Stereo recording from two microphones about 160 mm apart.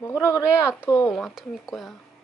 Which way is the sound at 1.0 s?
Centre (ahead or behind).